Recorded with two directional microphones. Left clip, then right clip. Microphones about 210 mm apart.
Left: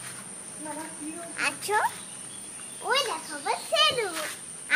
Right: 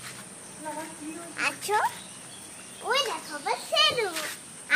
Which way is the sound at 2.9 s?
5° right (ahead or behind).